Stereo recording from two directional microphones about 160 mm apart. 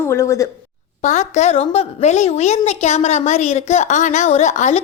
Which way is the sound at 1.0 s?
45° left (ahead or behind).